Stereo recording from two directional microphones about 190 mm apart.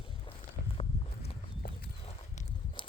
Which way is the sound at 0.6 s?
55° left (ahead or behind).